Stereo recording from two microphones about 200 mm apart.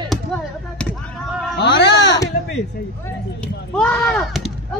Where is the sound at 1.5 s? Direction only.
60° left (ahead or behind).